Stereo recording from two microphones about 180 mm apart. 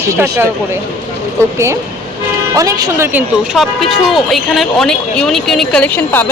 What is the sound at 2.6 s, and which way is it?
Speech, 20° right (ahead or behind).